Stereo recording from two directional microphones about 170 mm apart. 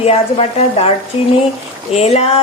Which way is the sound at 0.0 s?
35° left (ahead or behind).